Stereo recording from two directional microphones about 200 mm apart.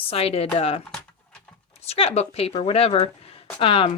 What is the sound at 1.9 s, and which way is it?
Speech, 30° left (ahead or behind).